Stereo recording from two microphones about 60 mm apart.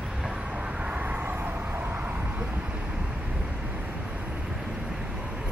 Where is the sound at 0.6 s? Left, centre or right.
Right.